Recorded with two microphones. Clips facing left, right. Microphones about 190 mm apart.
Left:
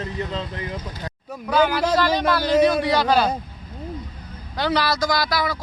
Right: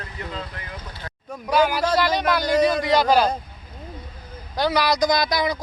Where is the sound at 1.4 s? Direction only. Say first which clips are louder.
Left 1 dB; 10° right (ahead or behind).